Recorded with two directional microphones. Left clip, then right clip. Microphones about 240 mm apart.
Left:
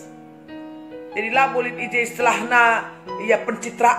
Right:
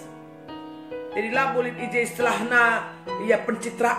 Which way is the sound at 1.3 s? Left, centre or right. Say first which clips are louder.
Left 5 dB; centre.